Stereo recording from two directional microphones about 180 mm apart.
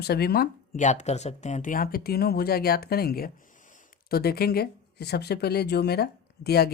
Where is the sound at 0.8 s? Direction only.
40° left (ahead or behind); by 6.6 s 60° left (ahead or behind).